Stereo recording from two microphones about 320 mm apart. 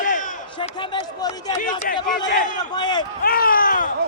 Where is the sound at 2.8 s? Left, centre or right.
Centre.